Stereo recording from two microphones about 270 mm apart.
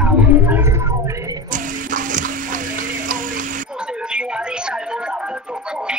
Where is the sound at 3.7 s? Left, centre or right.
Centre.